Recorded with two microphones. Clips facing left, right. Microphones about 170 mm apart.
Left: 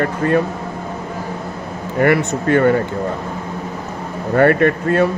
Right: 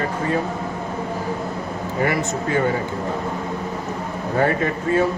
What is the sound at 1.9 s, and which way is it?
Speech, 65° left (ahead or behind).